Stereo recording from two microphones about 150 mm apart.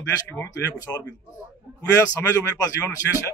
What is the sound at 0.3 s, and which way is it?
A man's voice, 20° left (ahead or behind).